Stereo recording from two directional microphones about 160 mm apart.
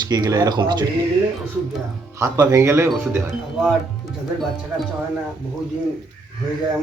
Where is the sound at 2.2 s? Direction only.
20° right (ahead or behind).